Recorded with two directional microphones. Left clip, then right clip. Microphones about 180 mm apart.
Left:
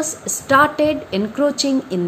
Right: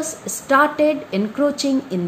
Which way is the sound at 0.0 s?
5° left (ahead or behind).